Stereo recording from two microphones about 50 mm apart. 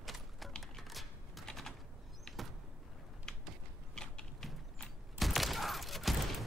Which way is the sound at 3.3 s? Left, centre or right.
Centre.